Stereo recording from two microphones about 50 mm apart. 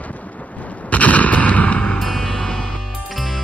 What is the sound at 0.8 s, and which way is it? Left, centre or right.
Gunshot, left.